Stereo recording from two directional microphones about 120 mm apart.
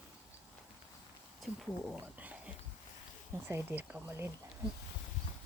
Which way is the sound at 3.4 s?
20° right (ahead or behind).